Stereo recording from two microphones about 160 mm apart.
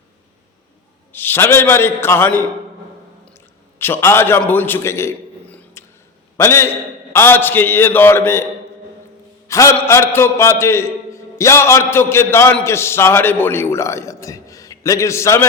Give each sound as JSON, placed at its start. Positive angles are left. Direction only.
{"t": 1.1, "sound": "a man's voice", "side_deg": 15}
{"t": 3.2, "sound": "a sound", "side_deg": 15}
{"t": 6.3, "sound": "a man's voice", "side_deg": 15}
{"t": 9.5, "sound": "a man's voice", "side_deg": 15}